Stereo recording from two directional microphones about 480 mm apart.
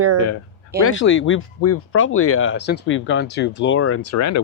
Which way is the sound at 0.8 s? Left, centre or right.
Left.